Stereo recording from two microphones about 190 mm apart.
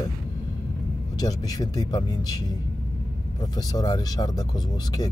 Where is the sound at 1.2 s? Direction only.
20° left (ahead or behind).